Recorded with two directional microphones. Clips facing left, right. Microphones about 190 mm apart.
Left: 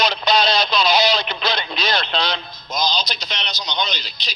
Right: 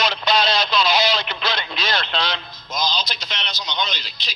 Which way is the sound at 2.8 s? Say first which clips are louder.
Left 2 dB; 15° left (ahead or behind).